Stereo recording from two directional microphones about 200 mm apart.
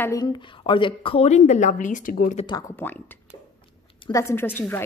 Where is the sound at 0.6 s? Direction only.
25° left (ahead or behind); by 2.4 s 45° left (ahead or behind).